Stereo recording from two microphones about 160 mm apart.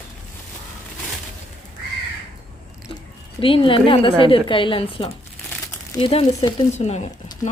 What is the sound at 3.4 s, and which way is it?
A woman's voice, 35° left (ahead or behind).